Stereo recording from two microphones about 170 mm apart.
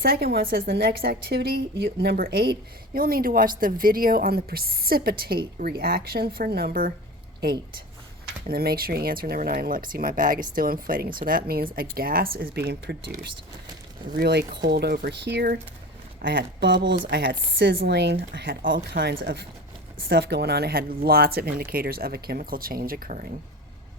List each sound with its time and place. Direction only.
0.0 s a woman's voice: 65° right (ahead or behind)
8.4 s a woman's voice: 60° right (ahead or behind)
14.2 s speech: 75° right (ahead or behind)
16.2 s a woman's voice: 90° right; by 23.2 s 55° right (ahead or behind)